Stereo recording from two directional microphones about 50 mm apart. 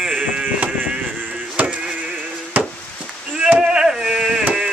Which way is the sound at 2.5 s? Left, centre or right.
Right.